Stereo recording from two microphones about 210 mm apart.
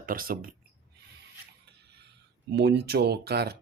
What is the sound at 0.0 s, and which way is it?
Speech, 40° right (ahead or behind).